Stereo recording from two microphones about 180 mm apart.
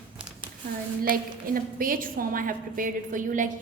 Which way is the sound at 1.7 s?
50° right (ahead or behind).